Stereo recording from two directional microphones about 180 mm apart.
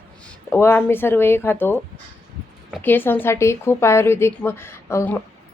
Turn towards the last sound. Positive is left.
turn(degrees=15)  # may be behind; listen again after turning